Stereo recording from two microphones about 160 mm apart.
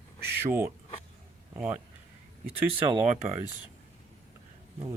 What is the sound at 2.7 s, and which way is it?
Speech, 35° right (ahead or behind).